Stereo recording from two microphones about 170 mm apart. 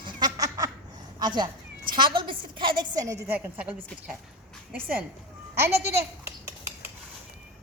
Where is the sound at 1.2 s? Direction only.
25° right (ahead or behind).